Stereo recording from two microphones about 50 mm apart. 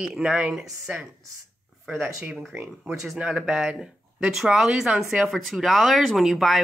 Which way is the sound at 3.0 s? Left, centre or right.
Centre.